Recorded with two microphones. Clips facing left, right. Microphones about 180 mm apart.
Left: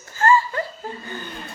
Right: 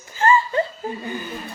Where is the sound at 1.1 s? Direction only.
10° right (ahead or behind).